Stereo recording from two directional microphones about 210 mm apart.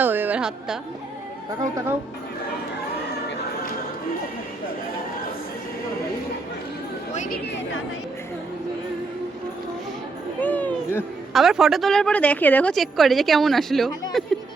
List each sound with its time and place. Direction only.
0.0 s a sound: 10° right (ahead or behind)
1.7 s speech: 15° right (ahead or behind)
7.1 s chatter: 35° left (ahead or behind)
7.4 s a woman's voice: 55° left (ahead or behind)
10.4 s speech: 5° left (ahead or behind)